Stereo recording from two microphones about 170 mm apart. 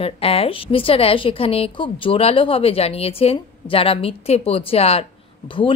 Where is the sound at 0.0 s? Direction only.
35° left (ahead or behind).